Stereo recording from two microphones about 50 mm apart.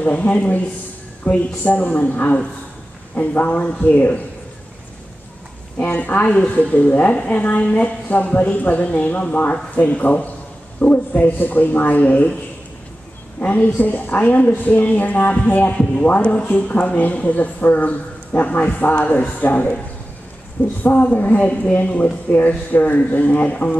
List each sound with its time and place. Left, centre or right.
0.0 s speech: left
5.8 s speech: left
13.4 s speech: left